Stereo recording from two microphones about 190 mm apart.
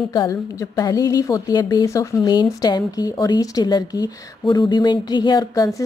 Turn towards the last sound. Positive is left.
turn(degrees=20)  # may be behind; listen again after turning